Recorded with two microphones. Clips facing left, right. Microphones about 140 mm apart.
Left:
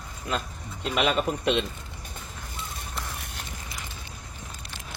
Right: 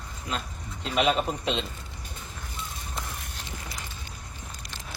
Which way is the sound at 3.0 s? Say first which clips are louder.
Left 1 dB; 70° left (ahead or behind).